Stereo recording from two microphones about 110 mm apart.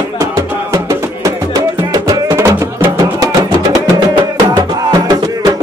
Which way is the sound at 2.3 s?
25° right (ahead or behind).